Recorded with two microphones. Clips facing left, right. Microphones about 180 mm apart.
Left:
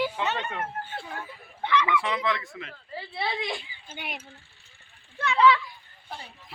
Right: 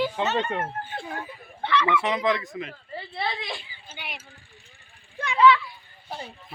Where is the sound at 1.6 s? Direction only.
15° left (ahead or behind).